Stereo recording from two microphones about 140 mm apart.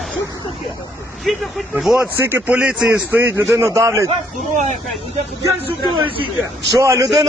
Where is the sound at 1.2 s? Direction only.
Centre (ahead or behind).